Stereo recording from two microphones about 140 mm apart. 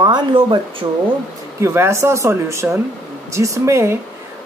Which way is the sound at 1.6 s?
20° right (ahead or behind).